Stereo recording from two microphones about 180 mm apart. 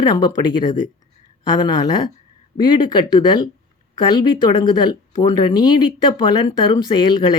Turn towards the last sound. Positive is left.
turn(degrees=25)  # may be behind; listen again after turning